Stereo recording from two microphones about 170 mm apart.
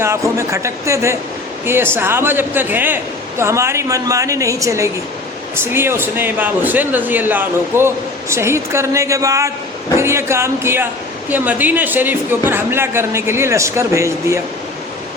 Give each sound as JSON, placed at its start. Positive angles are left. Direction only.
{"t": 0.0, "sound": "speech", "side_deg": -15}